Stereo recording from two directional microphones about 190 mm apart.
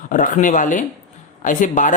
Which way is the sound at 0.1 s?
45° left (ahead or behind).